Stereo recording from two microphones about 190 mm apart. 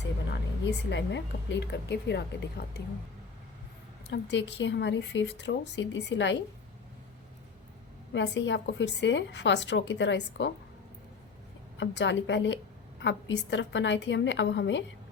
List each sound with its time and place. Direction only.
0.3 s a woman's voice: 65° left (ahead or behind)
4.1 s a woman's voice: 65° left (ahead or behind)
8.1 s a woman's voice: 70° left (ahead or behind)
11.8 s a woman's voice: 70° left (ahead or behind)